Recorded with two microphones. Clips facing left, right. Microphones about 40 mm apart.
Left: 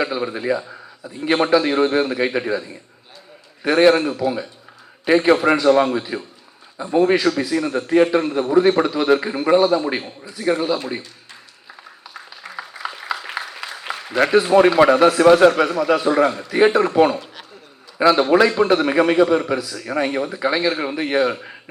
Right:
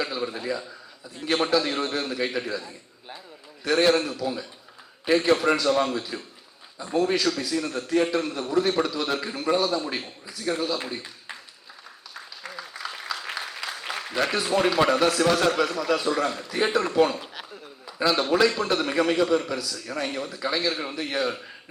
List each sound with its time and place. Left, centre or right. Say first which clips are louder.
0.0 s a man's voice: left 7 dB; left
10.0 s a man's voice: left 5 dB; centre
10.3 s a man's voice: left 7 dB; left
12.7 s applause: left 6 dB; centre
14.3 s a man's voice: left 11 dB; centre